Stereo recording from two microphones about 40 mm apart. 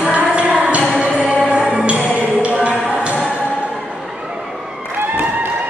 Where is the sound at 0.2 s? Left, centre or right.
Right.